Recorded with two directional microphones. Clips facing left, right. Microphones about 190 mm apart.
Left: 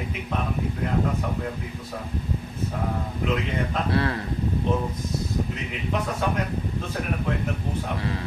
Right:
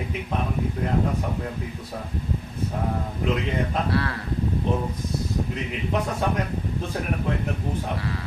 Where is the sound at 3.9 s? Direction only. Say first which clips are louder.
Left 1 dB; 20° left (ahead or behind).